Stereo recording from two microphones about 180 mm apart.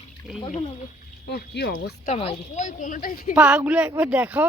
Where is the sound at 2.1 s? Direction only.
35° left (ahead or behind).